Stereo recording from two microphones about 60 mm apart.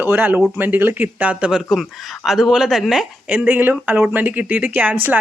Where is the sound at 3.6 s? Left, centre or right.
Right.